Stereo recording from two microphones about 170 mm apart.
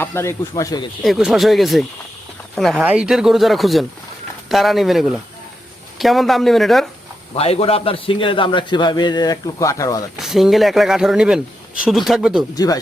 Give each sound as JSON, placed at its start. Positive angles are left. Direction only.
{"t": 0.0, "sound": "speech", "side_deg": 15}
{"t": 1.0, "sound": "speech", "side_deg": 0}
{"t": 7.3, "sound": "a man's voice", "side_deg": 35}
{"t": 10.2, "sound": "speech", "side_deg": 0}
{"t": 12.5, "sound": "a man's voice", "side_deg": 20}